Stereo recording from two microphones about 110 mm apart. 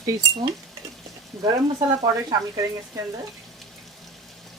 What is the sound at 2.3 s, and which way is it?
Speech, 30° right (ahead or behind).